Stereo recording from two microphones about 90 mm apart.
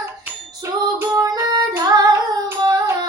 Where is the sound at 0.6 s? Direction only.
30° right (ahead or behind).